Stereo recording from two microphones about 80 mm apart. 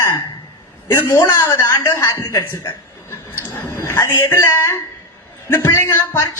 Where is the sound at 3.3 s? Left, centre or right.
Left.